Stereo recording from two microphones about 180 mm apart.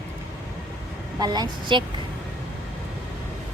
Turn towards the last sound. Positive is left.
turn(degrees=-25)  # may be behind; listen again after turning